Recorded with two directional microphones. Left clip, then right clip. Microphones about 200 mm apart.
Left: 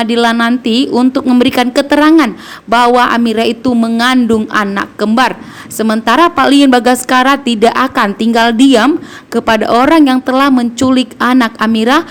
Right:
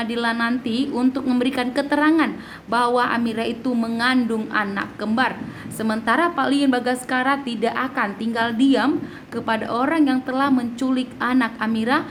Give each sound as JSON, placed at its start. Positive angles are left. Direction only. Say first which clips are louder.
{"t": 0.0, "sound": "speech", "louder": "left 12 dB", "side_deg": 50}